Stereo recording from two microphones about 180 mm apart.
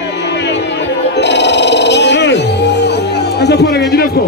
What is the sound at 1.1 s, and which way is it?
Music, 70° left (ahead or behind).